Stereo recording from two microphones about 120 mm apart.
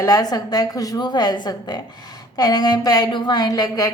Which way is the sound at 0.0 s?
30° left (ahead or behind).